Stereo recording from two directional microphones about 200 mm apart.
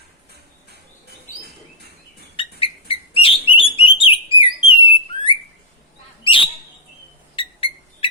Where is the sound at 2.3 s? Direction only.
25° left (ahead or behind).